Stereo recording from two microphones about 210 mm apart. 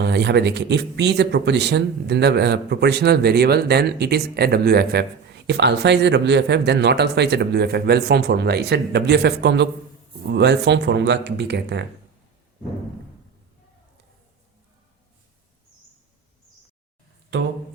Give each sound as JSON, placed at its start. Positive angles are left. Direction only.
{"t": 0.0, "sound": "speech", "side_deg": -55}
{"t": 17.3, "sound": "speech", "side_deg": -55}